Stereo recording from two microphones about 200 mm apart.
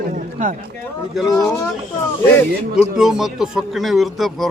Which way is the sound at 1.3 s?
20° left (ahead or behind).